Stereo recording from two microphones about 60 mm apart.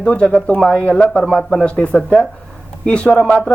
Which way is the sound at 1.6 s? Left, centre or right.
Left.